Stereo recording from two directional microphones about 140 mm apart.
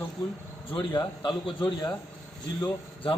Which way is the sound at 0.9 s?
35° left (ahead or behind).